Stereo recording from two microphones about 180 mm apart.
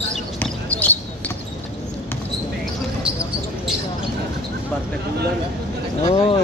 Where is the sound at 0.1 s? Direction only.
10° left (ahead or behind).